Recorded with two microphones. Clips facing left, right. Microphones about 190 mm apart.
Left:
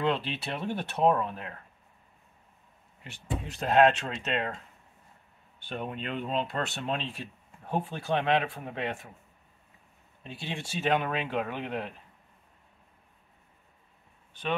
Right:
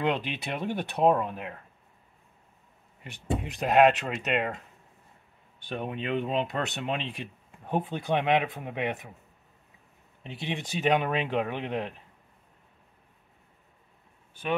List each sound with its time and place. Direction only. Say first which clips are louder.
0.0 s speech: even; 15° right (ahead or behind)
3.0 s speech: right 4 dB; 15° right (ahead or behind)
5.8 s speech: right 4 dB; 15° right (ahead or behind)
10.2 s speech: right 3 dB; 20° right (ahead or behind)